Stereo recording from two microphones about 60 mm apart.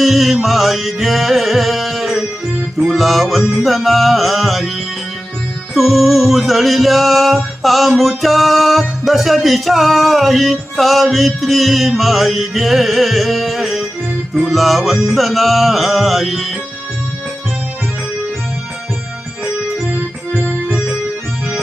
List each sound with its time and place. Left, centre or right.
0.0 s music: centre
5.7 s music: centre
20.3 s music: left